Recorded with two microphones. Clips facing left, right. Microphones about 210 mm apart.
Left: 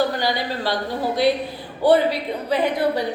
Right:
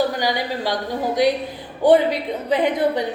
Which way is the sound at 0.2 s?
15° right (ahead or behind).